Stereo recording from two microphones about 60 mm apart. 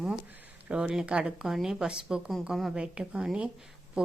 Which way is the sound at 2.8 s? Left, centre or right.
Centre.